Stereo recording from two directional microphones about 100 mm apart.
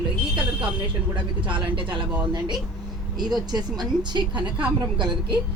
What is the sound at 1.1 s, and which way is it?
Speech, 55° right (ahead or behind).